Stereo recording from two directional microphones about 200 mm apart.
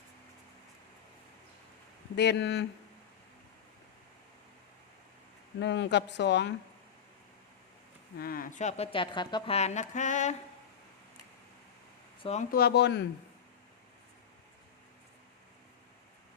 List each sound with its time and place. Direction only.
2.1 s speech: 60° left (ahead or behind)
5.5 s speech: 60° left (ahead or behind)
8.2 s speech: 45° left (ahead or behind)
12.2 s speech: 30° left (ahead or behind)
12.5 s speech: 50° left (ahead or behind)